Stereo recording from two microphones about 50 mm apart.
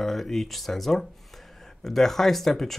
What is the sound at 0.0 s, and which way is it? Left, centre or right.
Speech, centre.